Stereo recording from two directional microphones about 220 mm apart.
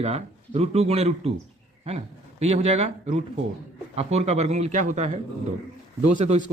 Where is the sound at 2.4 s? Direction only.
30° right (ahead or behind).